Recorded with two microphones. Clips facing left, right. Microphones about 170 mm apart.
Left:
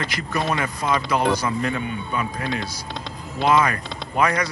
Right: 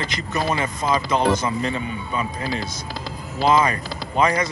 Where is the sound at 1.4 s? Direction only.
25° right (ahead or behind).